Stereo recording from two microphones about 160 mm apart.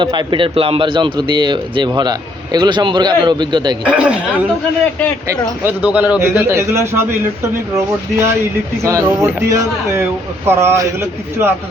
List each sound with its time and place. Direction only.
0.0 s speech: 30° right (ahead or behind)
3.8 s speech: 5° right (ahead or behind)
5.6 s speech: 10° right (ahead or behind)
8.8 s speech: 15° right (ahead or behind)